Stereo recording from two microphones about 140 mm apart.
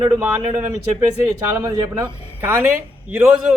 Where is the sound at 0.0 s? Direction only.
15° right (ahead or behind).